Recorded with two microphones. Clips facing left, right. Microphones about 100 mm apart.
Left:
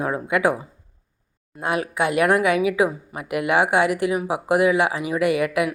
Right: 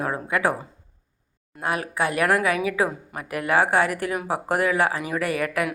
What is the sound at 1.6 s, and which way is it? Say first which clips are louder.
A woman's voice: left 2 dB; 25° left (ahead or behind).